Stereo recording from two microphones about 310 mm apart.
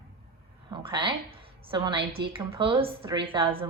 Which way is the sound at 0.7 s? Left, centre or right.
Centre.